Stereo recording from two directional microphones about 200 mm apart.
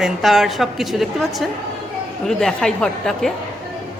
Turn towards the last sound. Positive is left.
turn(degrees=0)  # may be behind; listen again after turning